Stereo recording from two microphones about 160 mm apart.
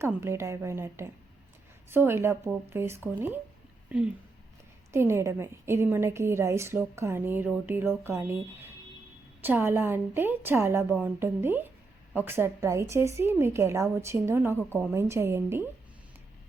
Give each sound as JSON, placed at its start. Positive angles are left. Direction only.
{"t": 0.0, "sound": "a woman's voice", "side_deg": -15}